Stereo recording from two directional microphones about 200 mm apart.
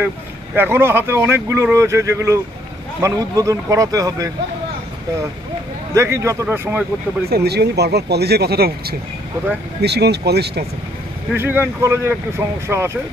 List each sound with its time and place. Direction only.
0.6 s speech: 10° right (ahead or behind)
5.9 s speech: 15° right (ahead or behind)
7.2 s speech: 55° right (ahead or behind)
11.3 s speech: 10° right (ahead or behind)